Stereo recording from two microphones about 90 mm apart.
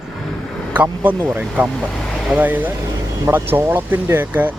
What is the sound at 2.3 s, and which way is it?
Speech, 20° right (ahead or behind).